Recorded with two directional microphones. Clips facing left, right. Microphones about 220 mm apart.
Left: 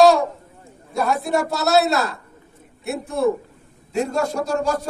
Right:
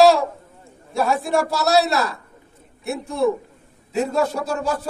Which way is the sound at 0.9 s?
Centre (ahead or behind).